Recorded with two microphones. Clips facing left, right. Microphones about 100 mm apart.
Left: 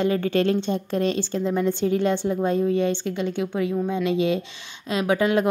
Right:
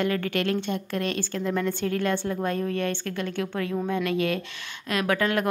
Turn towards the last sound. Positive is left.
turn(degrees=20)  # may be behind; listen again after turning